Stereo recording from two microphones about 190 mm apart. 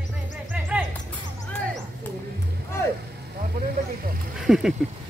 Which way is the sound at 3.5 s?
50° right (ahead or behind).